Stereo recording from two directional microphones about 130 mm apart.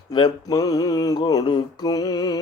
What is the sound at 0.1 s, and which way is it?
Mantra, 30° left (ahead or behind).